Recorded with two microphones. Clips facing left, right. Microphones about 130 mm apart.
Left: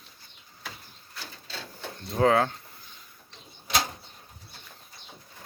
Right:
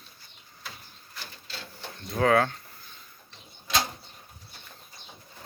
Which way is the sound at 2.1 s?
25° left (ahead or behind).